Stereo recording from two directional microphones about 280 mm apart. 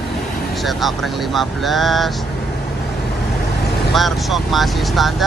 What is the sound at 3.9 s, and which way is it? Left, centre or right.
Speech, centre.